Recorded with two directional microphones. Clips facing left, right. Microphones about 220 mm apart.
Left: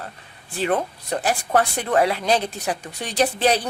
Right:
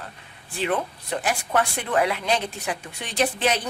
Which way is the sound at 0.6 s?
40° left (ahead or behind).